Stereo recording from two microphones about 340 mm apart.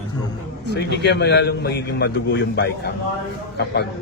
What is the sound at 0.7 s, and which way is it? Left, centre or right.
A man's voice, left.